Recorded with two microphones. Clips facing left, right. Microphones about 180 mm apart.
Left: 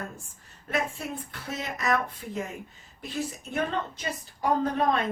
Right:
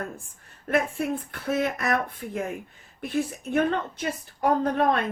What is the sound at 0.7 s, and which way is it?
Speech, 55° right (ahead or behind).